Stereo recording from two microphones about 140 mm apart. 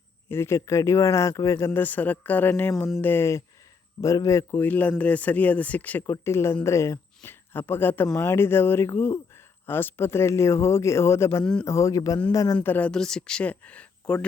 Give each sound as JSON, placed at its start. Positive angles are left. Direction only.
{"t": 0.3, "sound": "speech", "side_deg": 20}
{"t": 6.7, "sound": "a sound", "side_deg": 20}
{"t": 7.7, "sound": "speech", "side_deg": 15}
{"t": 12.5, "sound": "speech", "side_deg": 10}